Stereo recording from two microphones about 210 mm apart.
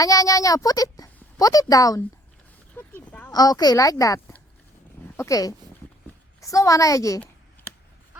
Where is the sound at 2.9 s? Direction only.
10° left (ahead or behind).